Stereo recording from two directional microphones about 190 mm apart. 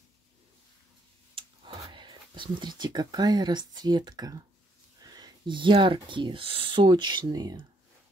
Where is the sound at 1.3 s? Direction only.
25° right (ahead or behind).